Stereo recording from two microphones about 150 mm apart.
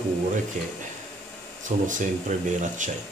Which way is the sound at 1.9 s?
55° right (ahead or behind).